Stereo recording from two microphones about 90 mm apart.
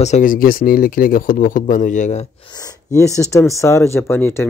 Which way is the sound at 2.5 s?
45° left (ahead or behind).